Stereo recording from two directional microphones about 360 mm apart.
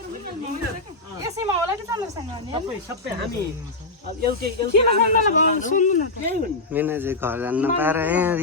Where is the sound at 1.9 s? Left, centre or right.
Centre.